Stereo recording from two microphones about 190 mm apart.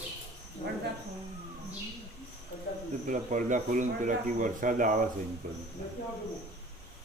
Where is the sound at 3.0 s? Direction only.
40° right (ahead or behind).